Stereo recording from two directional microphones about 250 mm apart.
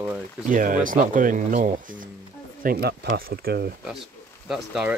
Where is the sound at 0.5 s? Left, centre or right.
Right.